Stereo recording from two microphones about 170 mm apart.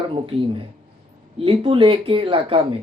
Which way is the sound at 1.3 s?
30° right (ahead or behind).